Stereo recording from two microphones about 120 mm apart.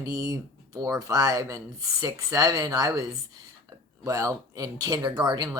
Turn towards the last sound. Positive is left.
turn(degrees=-35)  # may be behind; listen again after turning